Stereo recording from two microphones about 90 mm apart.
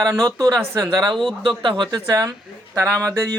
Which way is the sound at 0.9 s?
50° right (ahead or behind).